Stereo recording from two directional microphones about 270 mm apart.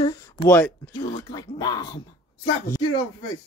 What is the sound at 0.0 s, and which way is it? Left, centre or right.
Speech, centre.